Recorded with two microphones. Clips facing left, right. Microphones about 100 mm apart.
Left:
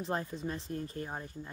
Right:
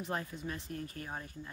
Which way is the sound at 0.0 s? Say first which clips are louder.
Left 3 dB; 30° left (ahead or behind).